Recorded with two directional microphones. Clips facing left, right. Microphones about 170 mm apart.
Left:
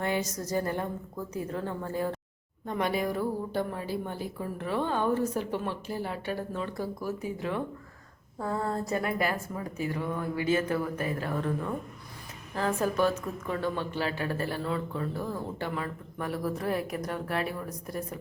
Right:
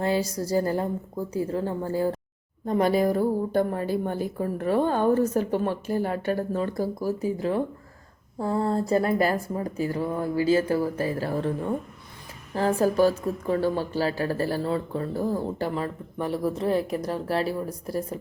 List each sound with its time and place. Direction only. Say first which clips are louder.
0.0 s a woman's voice: right 5 dB; 30° right (ahead or behind)